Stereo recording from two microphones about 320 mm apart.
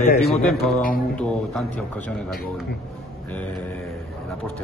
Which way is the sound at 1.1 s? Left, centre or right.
Centre.